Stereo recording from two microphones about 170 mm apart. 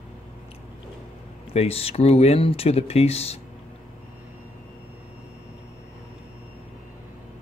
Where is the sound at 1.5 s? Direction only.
35° left (ahead or behind).